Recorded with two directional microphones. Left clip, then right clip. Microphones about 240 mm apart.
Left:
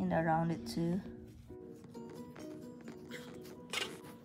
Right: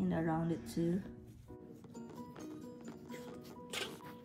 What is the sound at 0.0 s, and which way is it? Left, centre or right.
Speech, left.